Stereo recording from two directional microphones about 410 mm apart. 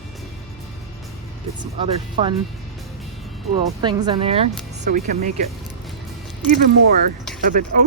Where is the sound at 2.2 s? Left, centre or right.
Centre.